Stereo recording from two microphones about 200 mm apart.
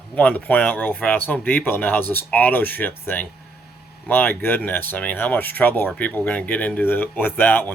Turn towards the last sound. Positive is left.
turn(degrees=10)  # may be behind; listen again after turning